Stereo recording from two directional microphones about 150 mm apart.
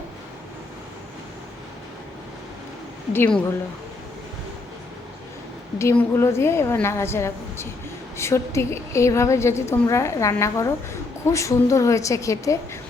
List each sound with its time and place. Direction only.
3.1 s a woman's voice: 10° left (ahead or behind)
5.8 s a woman's voice: 15° left (ahead or behind)